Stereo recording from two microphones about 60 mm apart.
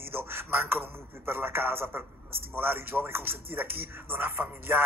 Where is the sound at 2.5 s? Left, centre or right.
Right.